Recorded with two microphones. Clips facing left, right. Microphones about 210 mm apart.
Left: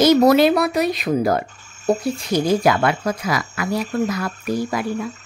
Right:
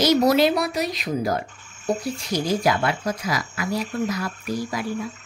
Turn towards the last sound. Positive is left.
turn(degrees=65)  # may be behind; listen again after turning